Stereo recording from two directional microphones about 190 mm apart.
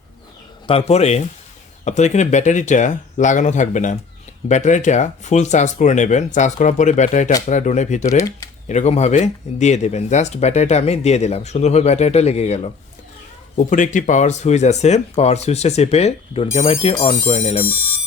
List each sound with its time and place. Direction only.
0.7 s speech: 30° left (ahead or behind)